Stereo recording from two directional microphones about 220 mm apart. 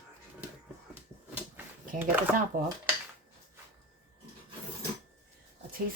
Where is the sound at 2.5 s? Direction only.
40° right (ahead or behind).